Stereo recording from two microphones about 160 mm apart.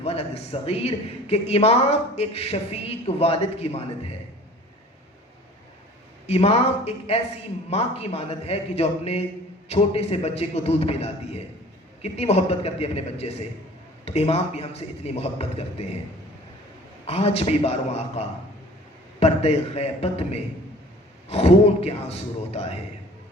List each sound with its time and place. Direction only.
0.0 s speech: 40° left (ahead or behind)
6.2 s speech: 40° left (ahead or behind)
17.1 s speech: 40° left (ahead or behind)